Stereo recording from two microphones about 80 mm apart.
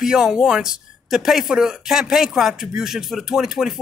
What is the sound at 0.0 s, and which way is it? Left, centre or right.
Speech, centre.